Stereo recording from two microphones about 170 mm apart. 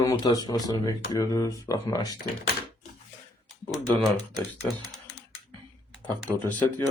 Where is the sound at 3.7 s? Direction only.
Centre (ahead or behind).